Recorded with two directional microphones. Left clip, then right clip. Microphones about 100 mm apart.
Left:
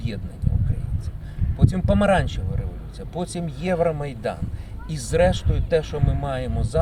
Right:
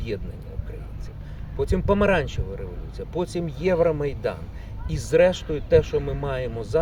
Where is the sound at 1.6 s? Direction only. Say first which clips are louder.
Left 1 dB; 35° right (ahead or behind).